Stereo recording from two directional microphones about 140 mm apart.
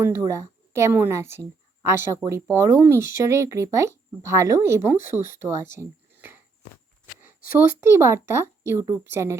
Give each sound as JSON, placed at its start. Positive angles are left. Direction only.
{"t": 0.0, "sound": "a woman's voice", "side_deg": -15}
{"t": 5.7, "sound": "a sound", "side_deg": -15}
{"t": 7.5, "sound": "speech", "side_deg": -20}